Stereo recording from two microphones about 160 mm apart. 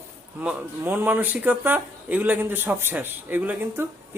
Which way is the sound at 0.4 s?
10° right (ahead or behind).